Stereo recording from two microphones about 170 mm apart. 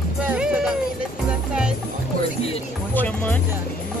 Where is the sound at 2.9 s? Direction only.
10° left (ahead or behind).